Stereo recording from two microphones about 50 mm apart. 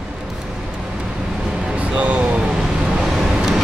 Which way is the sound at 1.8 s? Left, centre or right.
Right.